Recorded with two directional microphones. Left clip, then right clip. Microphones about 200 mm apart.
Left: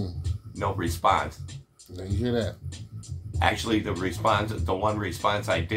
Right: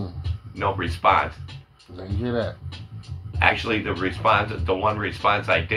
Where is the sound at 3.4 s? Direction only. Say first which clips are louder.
Right 4 dB; 20° left (ahead or behind).